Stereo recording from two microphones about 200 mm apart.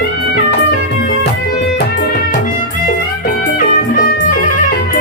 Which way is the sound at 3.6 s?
45° left (ahead or behind).